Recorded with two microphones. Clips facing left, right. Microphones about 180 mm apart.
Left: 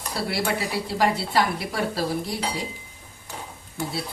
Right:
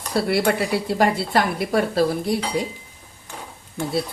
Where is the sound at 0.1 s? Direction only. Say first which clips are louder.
Right 7 dB; 55° right (ahead or behind).